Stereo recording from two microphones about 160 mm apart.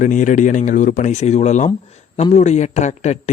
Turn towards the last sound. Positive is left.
turn(degrees=45)  # may be behind; listen again after turning